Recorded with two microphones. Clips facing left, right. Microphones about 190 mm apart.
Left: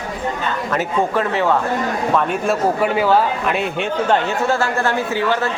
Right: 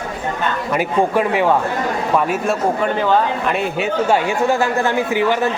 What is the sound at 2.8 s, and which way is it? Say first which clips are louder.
Speech: left 1 dB; 5° left (ahead or behind).